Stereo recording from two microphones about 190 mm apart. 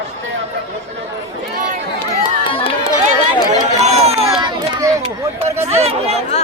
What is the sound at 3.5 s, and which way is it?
Run, 35° right (ahead or behind).